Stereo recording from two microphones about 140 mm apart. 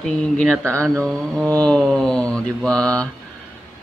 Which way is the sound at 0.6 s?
20° right (ahead or behind).